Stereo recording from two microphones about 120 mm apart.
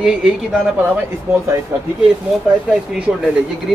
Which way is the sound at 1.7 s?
20° right (ahead or behind).